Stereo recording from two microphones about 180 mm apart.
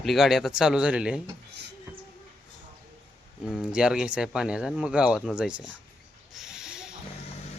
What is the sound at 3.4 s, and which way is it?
Speech, 5° right (ahead or behind).